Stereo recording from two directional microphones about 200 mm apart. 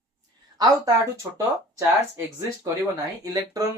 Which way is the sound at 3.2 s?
15° right (ahead or behind).